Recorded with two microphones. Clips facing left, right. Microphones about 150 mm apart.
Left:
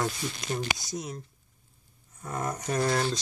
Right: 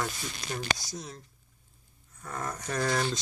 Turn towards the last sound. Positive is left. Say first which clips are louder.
# left 2 dB
turn(degrees=15)  # may be behind; listen again after turning